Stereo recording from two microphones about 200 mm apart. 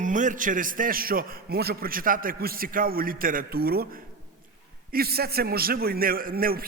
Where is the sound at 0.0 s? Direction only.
40° right (ahead or behind).